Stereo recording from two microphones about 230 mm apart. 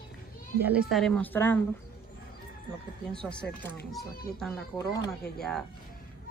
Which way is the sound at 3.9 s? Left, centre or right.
Centre.